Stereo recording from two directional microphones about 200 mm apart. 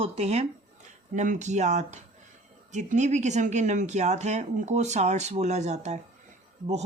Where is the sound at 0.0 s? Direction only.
30° right (ahead or behind).